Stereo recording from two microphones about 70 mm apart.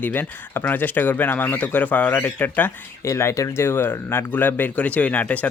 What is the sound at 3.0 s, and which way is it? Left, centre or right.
Speech, left.